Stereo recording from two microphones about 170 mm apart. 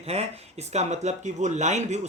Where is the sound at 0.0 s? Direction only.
40° right (ahead or behind).